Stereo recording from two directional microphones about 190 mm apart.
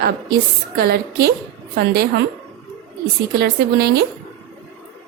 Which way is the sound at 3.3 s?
60° right (ahead or behind).